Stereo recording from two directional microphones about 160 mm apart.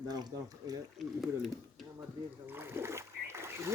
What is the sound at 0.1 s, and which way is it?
Speech, 25° right (ahead or behind).